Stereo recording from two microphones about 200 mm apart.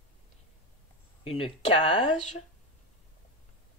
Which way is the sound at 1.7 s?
25° left (ahead or behind).